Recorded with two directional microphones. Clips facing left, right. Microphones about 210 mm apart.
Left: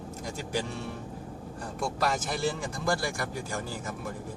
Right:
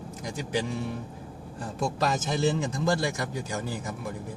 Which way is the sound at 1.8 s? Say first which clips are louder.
Right 2 dB; 20° right (ahead or behind).